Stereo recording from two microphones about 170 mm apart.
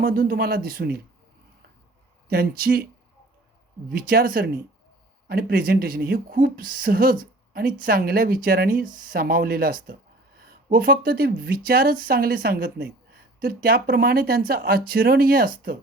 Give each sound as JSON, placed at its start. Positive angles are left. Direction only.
{"t": 0.0, "sound": "a woman's voice", "side_deg": -60}
{"t": 2.3, "sound": "a woman's voice", "side_deg": -60}
{"t": 3.9, "sound": "a woman's voice", "side_deg": -60}